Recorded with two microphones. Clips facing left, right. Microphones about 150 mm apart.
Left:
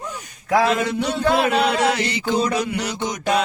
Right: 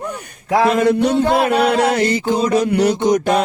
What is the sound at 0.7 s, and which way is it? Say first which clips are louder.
Music: right 7 dB; 50° right (ahead or behind).